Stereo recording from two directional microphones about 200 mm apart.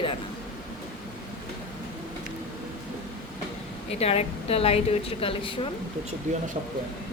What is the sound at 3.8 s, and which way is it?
A woman's voice, 30° left (ahead or behind).